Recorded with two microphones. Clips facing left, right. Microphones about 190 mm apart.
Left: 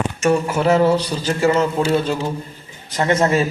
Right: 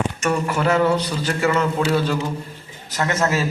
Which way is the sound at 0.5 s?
30° left (ahead or behind).